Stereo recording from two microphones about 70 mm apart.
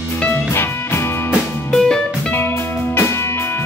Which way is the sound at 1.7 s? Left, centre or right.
Centre.